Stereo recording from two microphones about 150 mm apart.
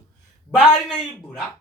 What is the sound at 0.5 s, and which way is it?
Speech, 5° right (ahead or behind).